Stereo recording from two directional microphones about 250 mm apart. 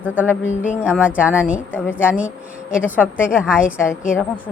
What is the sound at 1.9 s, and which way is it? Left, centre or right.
Speech, centre.